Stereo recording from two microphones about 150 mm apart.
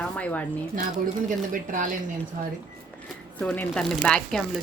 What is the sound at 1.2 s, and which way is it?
Speech, 65° right (ahead or behind).